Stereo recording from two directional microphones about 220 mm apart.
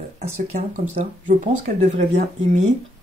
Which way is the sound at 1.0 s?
30° right (ahead or behind).